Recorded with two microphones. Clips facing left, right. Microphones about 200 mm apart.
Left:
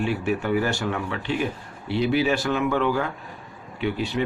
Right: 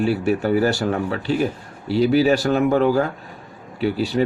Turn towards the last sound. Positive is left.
turn(degrees=-40)  # may be behind; listen again after turning